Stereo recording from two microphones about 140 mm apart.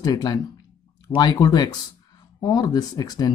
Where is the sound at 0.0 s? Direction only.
25° left (ahead or behind).